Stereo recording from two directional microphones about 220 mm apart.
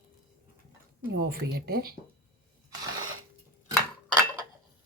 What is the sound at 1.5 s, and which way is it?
Speech, 45° right (ahead or behind).